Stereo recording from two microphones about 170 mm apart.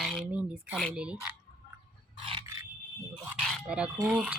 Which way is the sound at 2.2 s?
30° right (ahead or behind).